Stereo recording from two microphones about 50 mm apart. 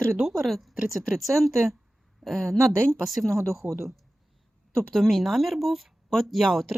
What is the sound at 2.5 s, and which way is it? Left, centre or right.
Speech, right.